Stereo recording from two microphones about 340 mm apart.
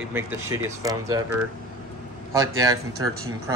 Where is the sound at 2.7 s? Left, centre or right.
Right.